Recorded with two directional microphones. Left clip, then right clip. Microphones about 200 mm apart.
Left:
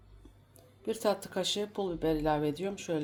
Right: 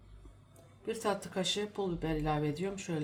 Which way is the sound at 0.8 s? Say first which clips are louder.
Left 3 dB; 35° left (ahead or behind).